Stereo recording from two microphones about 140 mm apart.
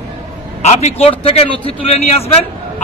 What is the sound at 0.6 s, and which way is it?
A man's voice, 50° left (ahead or behind).